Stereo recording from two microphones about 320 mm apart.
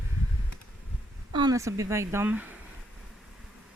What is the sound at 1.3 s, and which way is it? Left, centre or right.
Speech, centre.